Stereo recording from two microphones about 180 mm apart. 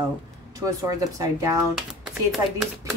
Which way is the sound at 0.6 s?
20° right (ahead or behind).